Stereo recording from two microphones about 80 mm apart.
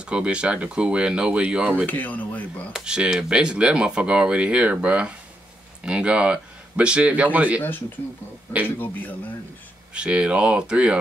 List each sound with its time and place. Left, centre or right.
0.0 s speech: centre
1.9 s speech: left
2.7 s speech: centre
8.6 s speech: left
9.9 s speech: centre